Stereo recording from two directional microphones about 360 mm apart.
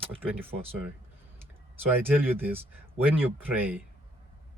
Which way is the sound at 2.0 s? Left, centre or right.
Centre.